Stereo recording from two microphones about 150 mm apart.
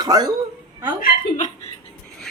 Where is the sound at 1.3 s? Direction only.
55° left (ahead or behind).